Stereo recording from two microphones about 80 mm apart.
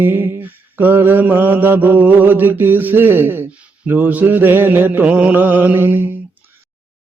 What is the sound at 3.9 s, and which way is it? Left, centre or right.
Mantra, right.